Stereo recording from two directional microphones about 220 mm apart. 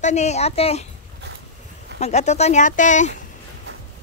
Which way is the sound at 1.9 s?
30° left (ahead or behind).